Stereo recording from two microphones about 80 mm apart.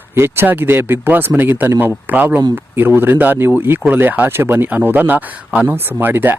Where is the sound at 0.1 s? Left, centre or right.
Right.